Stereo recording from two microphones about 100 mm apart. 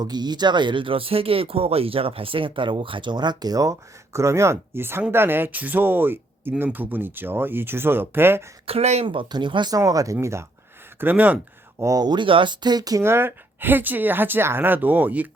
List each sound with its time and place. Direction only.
0.0 s speech: 45° right (ahead or behind); by 8.4 s 25° right (ahead or behind)
8.6 s speech: 85° right
9.0 s speech: 55° right (ahead or behind)
9.7 s speech: 35° right (ahead or behind)
11.0 s speech: 15° right (ahead or behind)
11.8 s speech: 35° right (ahead or behind)
13.0 s speech: 25° right (ahead or behind)